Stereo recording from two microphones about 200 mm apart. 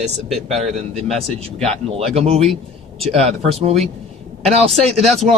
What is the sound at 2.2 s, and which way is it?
Speech, 30° right (ahead or behind).